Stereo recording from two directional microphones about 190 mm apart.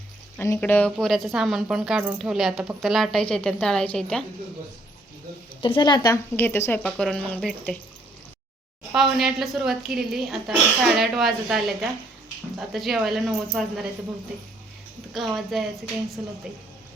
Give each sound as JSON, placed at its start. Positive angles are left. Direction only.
{"t": 0.3, "sound": "speech", "side_deg": 10}
{"t": 5.6, "sound": "a woman's voice", "side_deg": 25}
{"t": 8.9, "sound": "speech", "side_deg": 0}
{"t": 15.1, "sound": "speech", "side_deg": 0}